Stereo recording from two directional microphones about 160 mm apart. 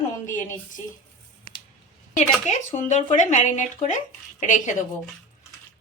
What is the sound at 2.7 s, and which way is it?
A woman's voice, 50° left (ahead or behind).